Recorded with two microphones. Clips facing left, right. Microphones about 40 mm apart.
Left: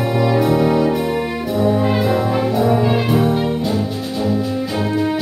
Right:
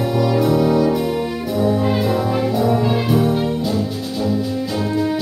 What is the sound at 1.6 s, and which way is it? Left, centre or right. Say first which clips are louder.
Brass instrument: left 1 dB; centre.